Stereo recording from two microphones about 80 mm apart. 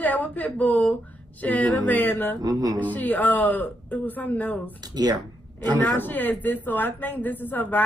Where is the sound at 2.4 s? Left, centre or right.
Right.